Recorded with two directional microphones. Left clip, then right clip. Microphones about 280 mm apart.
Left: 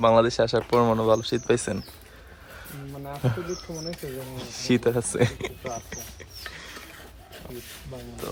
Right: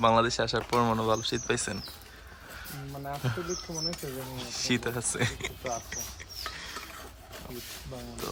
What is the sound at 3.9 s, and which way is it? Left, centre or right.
Speech, right.